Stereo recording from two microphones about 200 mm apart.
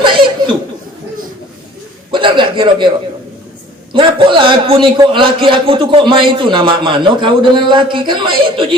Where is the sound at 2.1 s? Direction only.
25° right (ahead or behind).